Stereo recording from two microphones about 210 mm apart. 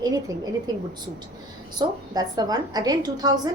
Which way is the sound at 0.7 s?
20° right (ahead or behind).